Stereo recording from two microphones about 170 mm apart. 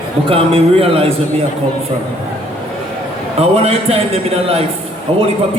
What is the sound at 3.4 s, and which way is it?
A man's voice, 35° right (ahead or behind).